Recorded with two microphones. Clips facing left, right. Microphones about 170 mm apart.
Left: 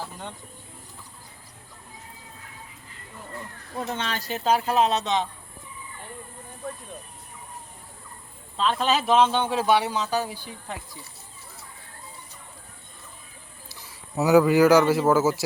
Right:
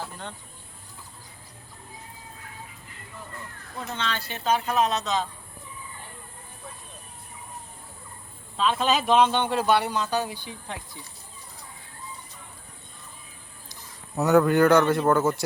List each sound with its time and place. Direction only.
0.0 s a sound: 10° left (ahead or behind)
3.8 s speech: 40° left (ahead or behind); by 5.3 s 25° left (ahead or behind)
8.5 s a man's voice: 5° right (ahead or behind)
14.2 s a man's voice: 5° left (ahead or behind)